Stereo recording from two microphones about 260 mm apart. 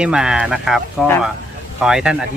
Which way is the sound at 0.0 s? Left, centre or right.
Centre.